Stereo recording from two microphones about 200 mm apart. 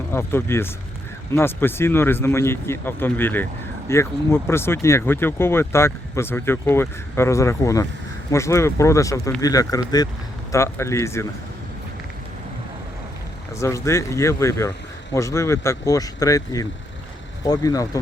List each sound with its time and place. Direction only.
0.1 s speech: 10° left (ahead or behind)
13.6 s speech: 15° left (ahead or behind)